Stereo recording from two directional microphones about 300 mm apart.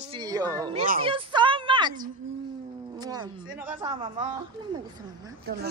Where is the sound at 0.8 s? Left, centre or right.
Centre.